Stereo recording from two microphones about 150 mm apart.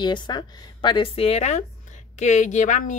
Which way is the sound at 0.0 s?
30° left (ahead or behind).